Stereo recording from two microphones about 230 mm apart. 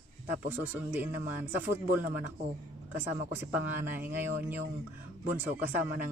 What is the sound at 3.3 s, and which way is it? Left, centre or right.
Speech, centre.